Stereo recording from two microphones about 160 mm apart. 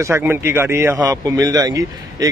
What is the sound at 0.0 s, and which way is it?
A man's voice, 15° right (ahead or behind).